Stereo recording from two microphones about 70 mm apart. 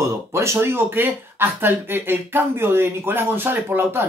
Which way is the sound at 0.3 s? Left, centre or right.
Right.